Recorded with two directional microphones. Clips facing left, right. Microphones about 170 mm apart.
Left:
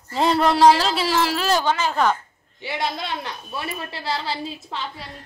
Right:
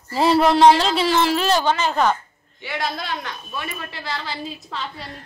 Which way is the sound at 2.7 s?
25° left (ahead or behind).